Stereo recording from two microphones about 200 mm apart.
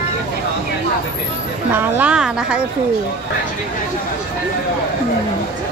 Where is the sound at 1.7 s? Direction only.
10° right (ahead or behind).